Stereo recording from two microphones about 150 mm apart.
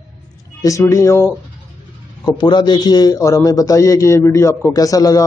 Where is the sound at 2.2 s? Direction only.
30° left (ahead or behind).